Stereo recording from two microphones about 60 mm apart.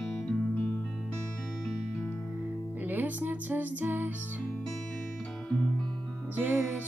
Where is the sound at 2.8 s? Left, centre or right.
Right.